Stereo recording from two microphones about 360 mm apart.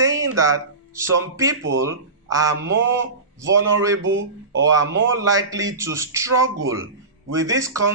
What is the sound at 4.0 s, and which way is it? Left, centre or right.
Speech, right.